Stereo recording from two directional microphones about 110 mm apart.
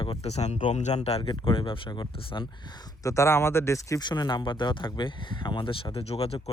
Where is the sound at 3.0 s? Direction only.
30° left (ahead or behind).